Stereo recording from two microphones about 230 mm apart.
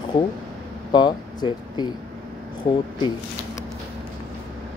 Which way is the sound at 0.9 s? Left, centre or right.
Centre.